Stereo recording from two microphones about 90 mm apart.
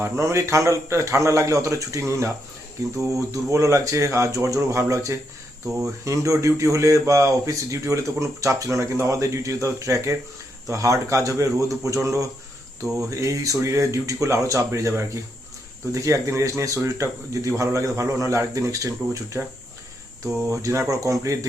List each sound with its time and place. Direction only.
0.0 s speech: 35° right (ahead or behind)
12.8 s speech: 5° right (ahead or behind)
13.1 s speech: 35° right (ahead or behind)
20.5 s speech: 35° right (ahead or behind)